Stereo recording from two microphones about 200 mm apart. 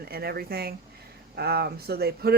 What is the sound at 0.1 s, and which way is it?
Speech, 50° right (ahead or behind).